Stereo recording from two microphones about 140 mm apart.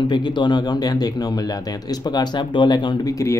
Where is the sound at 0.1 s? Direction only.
35° left (ahead or behind).